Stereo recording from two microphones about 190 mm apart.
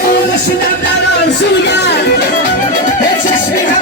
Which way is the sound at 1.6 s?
65° left (ahead or behind).